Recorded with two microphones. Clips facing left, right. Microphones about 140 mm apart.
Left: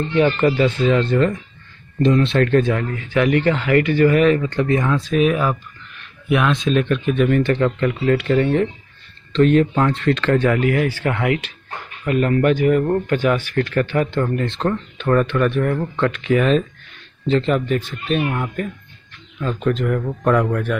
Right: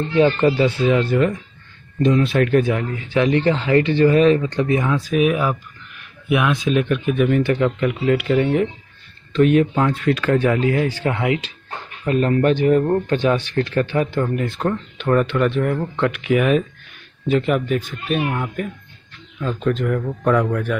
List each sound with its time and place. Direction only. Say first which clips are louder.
0.1 s speech: right 1 dB; 25° right (ahead or behind)
0.6 s a man's voice: even; 10° right (ahead or behind)
12.0 s a man's voice: even; 30° right (ahead or behind); by 20.7 s centre (ahead or behind)